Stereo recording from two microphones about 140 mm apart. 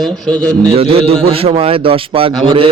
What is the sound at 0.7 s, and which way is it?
A man's voice, 45° right (ahead or behind).